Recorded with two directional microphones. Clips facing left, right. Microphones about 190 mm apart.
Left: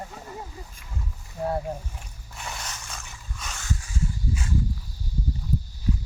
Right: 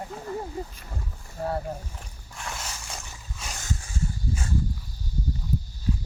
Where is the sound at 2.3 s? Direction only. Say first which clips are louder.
Even; centre (ahead or behind).